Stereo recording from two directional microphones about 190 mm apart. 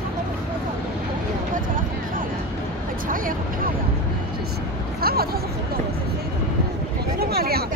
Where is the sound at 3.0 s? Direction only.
45° right (ahead or behind).